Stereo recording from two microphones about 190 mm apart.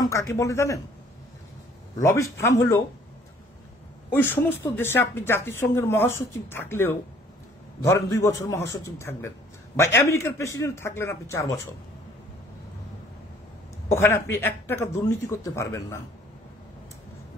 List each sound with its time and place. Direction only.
0.0 s speech: 15° left (ahead or behind)
2.0 s speech: 15° left (ahead or behind)
4.1 s speech: 10° left (ahead or behind)
13.8 s speech: 15° left (ahead or behind)